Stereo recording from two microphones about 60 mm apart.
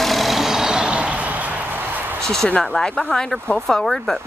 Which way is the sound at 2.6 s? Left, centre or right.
Centre.